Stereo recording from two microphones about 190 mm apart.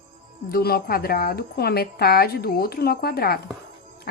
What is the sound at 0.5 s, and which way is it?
A woman's voice, 55° left (ahead or behind).